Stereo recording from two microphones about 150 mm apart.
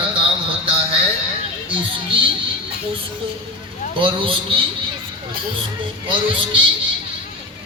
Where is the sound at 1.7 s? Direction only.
35° right (ahead or behind).